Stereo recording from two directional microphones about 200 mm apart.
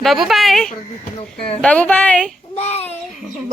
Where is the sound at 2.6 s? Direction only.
30° left (ahead or behind).